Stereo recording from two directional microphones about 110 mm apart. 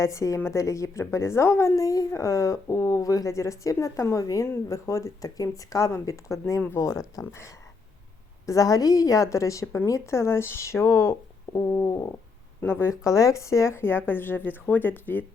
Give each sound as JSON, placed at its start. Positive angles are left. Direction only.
{"t": 0.0, "sound": "a woman's voice", "side_deg": 30}